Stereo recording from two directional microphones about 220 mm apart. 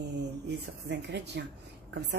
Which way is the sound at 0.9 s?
50° right (ahead or behind).